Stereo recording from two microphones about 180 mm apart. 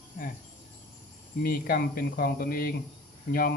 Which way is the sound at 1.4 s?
55° left (ahead or behind).